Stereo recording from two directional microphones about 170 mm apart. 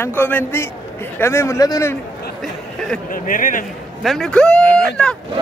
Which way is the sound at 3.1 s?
50° left (ahead or behind).